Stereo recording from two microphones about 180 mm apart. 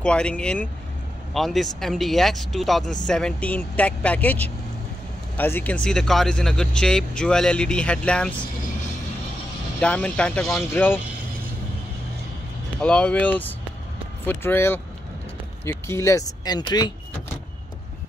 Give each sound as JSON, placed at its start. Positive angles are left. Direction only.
{"t": 0.0, "sound": "speech", "side_deg": 5}
{"t": 9.8, "sound": "speech", "side_deg": 5}
{"t": 12.8, "sound": "speech", "side_deg": 5}